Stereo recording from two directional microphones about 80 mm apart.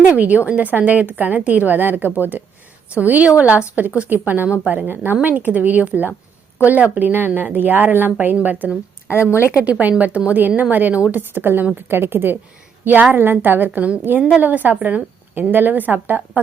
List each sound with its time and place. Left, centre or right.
0.2 s a woman's voice: centre
9.1 s speech: left
9.6 s a woman's voice: centre